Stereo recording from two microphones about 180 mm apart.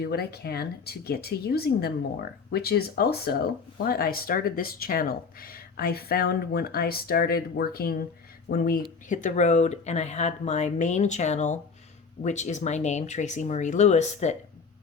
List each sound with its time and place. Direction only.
0.0 s speech: 60° left (ahead or behind); by 14.3 s 40° left (ahead or behind)